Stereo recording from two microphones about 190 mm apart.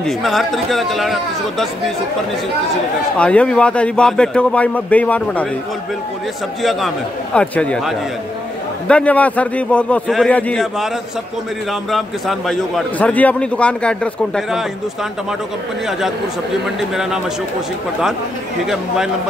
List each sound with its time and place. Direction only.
0.0 s a man's voice: centre (ahead or behind)
3.2 s a man's voice: 5° left (ahead or behind)
6.6 s a man's voice: centre (ahead or behind)
11.9 s a man's voice: centre (ahead or behind)
16.6 s a man's voice: centre (ahead or behind)